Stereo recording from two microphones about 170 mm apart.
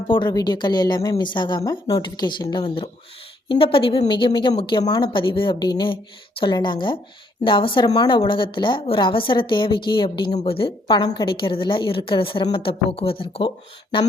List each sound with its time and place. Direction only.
0.1 s a woman's voice: 25° left (ahead or behind)